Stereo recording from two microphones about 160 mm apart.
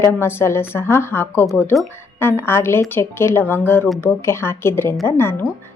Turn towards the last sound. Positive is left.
turn(degrees=15)  # may be behind; listen again after turning